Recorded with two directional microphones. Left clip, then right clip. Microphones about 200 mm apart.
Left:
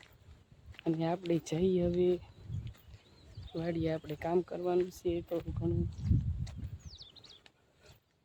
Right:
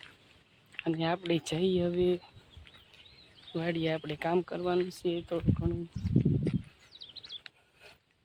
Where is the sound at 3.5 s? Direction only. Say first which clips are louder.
Right 3 dB; centre (ahead or behind).